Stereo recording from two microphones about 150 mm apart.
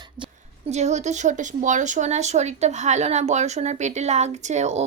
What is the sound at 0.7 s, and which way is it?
A woman's voice, 50° right (ahead or behind).